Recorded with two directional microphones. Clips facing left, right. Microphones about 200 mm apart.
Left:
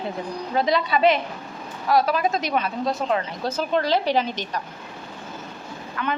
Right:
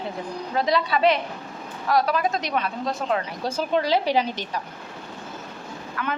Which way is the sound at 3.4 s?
10° right (ahead or behind).